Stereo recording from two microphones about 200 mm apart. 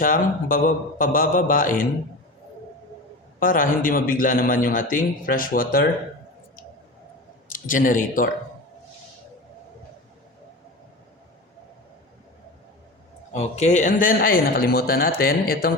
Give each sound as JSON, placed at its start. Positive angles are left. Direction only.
{"t": 0.0, "sound": "a man's voice", "side_deg": 45}
{"t": 3.4, "sound": "a man's voice", "side_deg": 45}
{"t": 7.5, "sound": "speech", "side_deg": 40}
{"t": 13.3, "sound": "a man's voice", "side_deg": 35}